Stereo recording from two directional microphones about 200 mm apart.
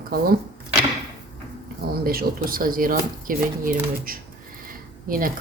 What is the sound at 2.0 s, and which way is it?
Speech, 50° right (ahead or behind).